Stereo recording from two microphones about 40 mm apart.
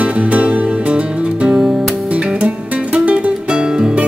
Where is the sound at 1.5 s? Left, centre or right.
Centre.